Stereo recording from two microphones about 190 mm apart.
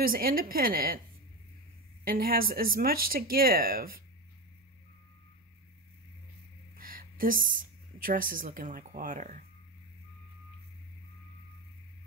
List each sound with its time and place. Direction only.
0.0 s speech: 50° right (ahead or behind)
2.0 s speech: 50° right (ahead or behind)
6.8 s a woman's voice: 50° right (ahead or behind)